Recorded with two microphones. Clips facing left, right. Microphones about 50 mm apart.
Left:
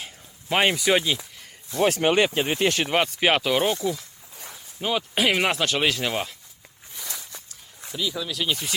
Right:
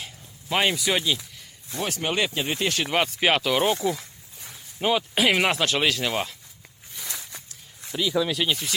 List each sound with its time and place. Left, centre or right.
0.0 s a sound: centre
0.9 s speech: centre
1.8 s speech: left
2.6 s speech: left
2.9 s speech: centre
4.9 s speech: centre
6.9 s walk: centre
8.1 s speech: right
8.4 s speech: centre